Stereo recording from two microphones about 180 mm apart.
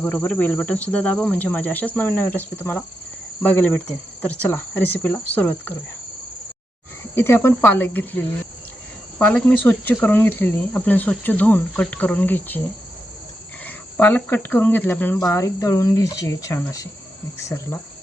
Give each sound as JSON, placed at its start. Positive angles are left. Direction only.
{"t": 0.0, "sound": "speech", "side_deg": 10}
{"t": 7.2, "sound": "speech", "side_deg": 15}
{"t": 13.7, "sound": "speech", "side_deg": 10}